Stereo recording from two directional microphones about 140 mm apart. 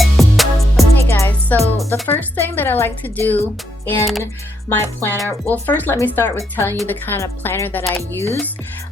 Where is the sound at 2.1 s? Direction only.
15° left (ahead or behind).